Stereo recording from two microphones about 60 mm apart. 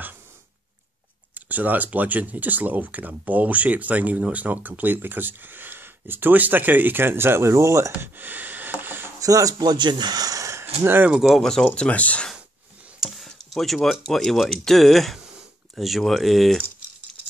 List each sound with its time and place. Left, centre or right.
1.3 s speech: right
8.2 s a sound: right
9.2 s speech: right
10.1 s a sound: right
10.6 s speech: right
11.1 s speech: centre
11.3 s speech: centre; by 12.3 s left
13.4 s speech: centre